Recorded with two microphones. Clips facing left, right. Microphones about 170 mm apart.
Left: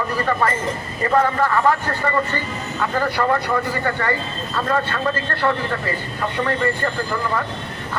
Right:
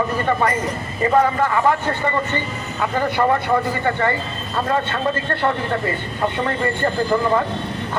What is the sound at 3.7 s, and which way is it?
Speech, 20° right (ahead or behind).